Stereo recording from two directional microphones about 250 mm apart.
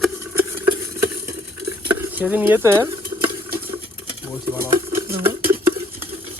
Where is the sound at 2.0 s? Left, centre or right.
Centre.